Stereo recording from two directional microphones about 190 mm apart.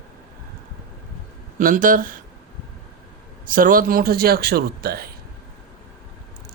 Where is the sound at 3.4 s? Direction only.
45° right (ahead or behind).